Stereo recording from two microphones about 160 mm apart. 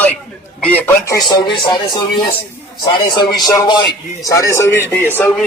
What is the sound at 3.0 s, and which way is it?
Speech, 25° left (ahead or behind).